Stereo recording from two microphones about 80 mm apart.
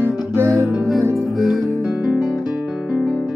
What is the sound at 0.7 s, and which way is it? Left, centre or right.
Music, centre.